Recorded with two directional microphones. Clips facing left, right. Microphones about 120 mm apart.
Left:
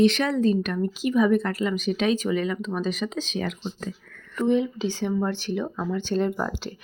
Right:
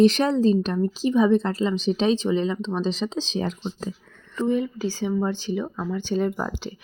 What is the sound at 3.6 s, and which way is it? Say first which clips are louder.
Speech: right 2 dB; 20° right (ahead or behind).